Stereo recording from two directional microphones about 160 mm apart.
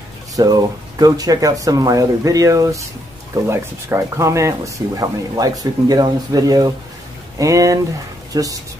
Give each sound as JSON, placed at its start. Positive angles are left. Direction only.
{"t": 0.4, "sound": "speech", "side_deg": -25}